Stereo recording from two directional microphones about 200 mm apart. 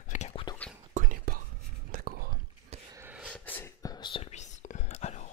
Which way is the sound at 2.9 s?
10° right (ahead or behind).